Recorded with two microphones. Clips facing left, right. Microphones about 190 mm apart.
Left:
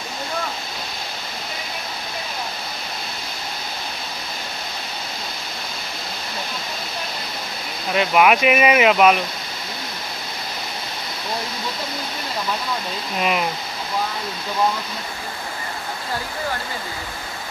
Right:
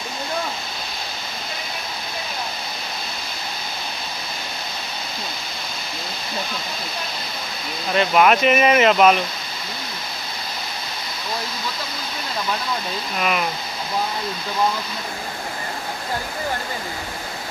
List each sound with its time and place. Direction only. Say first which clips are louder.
7.9 s speech: even; 5° left (ahead or behind)
13.2 s speech: left 1 dB; 20° left (ahead or behind)